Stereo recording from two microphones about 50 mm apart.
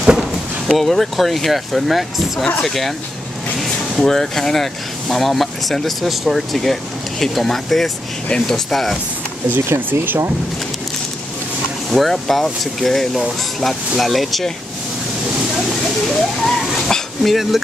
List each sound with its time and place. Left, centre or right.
0.0 s speech: centre
0.7 s speech: centre
4.0 s speech: centre
9.8 s speech: right
11.9 s speech: centre
16.1 s a sound: centre